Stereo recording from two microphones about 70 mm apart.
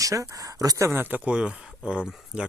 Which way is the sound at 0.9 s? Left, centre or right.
Right.